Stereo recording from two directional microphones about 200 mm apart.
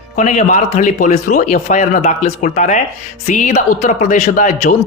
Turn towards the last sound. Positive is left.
turn(degrees=35)  # may be behind; listen again after turning